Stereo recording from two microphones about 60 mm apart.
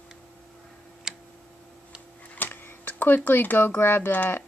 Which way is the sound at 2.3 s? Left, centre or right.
Left.